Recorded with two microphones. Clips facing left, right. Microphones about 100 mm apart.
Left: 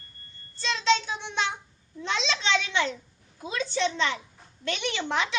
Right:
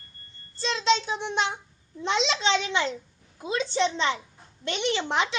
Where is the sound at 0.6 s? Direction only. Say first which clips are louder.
Right 1 dB; 25° right (ahead or behind).